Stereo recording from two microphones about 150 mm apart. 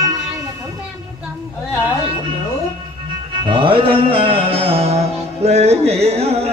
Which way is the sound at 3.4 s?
35° right (ahead or behind).